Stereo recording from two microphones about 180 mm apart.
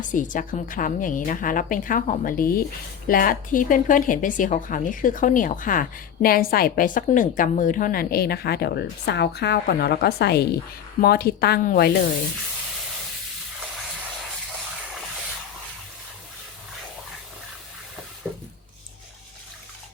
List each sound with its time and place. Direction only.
0.0 s a woman's voice: 45° left (ahead or behind)